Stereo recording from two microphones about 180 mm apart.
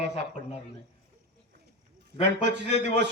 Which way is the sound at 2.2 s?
70° right (ahead or behind).